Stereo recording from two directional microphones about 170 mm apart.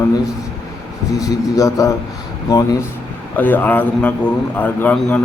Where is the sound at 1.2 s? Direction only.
20° left (ahead or behind).